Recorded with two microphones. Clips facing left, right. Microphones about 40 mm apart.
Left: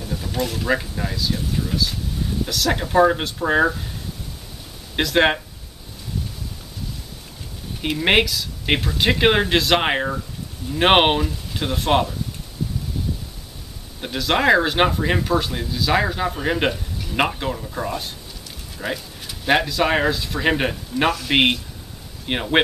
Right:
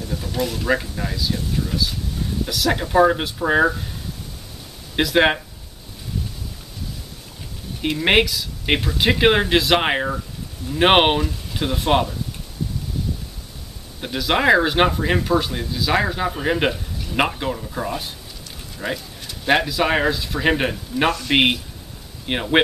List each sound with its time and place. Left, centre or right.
0.0 s speech: centre
4.9 s speech: centre
7.8 s speech: centre
14.0 s speech: centre